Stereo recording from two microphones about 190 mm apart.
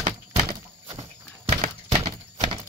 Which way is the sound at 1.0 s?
35° right (ahead or behind).